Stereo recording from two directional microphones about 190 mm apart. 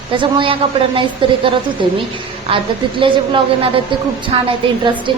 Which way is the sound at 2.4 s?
25° right (ahead or behind).